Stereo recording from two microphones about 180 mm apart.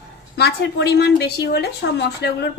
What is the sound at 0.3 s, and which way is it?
A woman's voice, 65° left (ahead or behind).